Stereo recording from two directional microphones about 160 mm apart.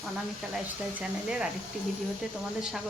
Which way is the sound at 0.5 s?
5° right (ahead or behind).